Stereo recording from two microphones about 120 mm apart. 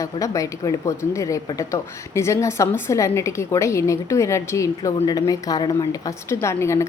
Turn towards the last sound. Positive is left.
turn(degrees=25)  # may be behind; listen again after turning